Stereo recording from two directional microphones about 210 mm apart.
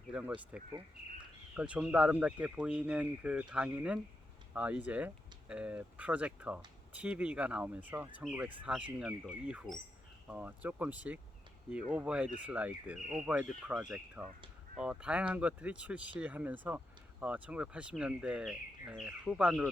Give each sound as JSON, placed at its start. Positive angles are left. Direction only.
{"t": 0.1, "sound": "speech", "side_deg": -5}